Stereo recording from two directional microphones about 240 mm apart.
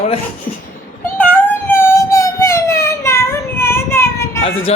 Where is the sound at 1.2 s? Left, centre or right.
Centre.